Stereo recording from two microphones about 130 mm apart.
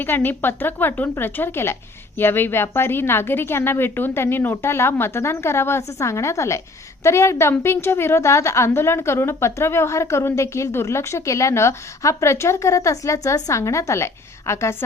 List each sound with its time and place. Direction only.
0.0 s a woman's voice: 15° left (ahead or behind)